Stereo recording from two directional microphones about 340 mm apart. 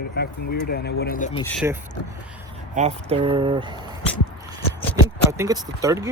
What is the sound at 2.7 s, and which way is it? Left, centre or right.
Speech, centre.